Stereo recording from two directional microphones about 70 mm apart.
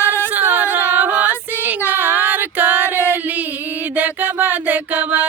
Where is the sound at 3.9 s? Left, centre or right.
Right.